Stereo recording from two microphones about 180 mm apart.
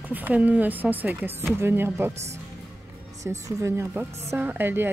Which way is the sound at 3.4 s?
15° right (ahead or behind).